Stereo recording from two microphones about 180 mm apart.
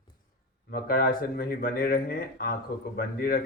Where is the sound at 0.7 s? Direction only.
55° left (ahead or behind).